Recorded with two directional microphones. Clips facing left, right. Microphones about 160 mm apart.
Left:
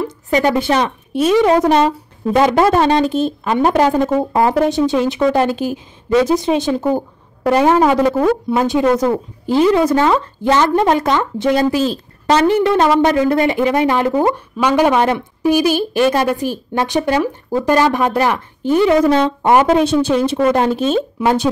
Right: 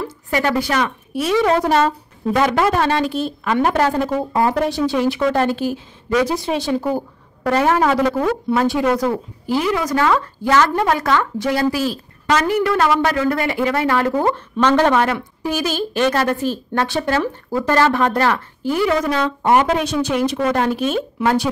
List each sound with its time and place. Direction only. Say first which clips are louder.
0.0 s a woman's voice: left 5 dB; 20° left (ahead or behind)